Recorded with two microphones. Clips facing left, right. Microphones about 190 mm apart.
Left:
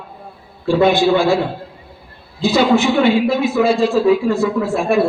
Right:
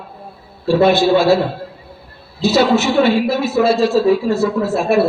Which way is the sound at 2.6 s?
15° left (ahead or behind).